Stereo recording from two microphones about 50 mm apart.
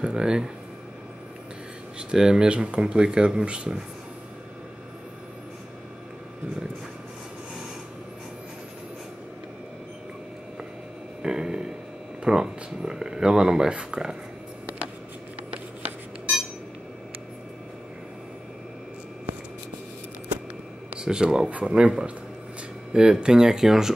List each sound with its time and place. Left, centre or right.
0.0 s speech: centre
2.0 s speech: centre
11.2 s a sound: centre
12.3 s speech: centre
20.9 s speech: centre
21.5 s speech: right; by 23.9 s centre